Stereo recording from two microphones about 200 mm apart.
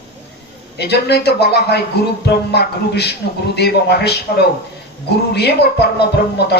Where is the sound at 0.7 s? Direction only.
55° left (ahead or behind).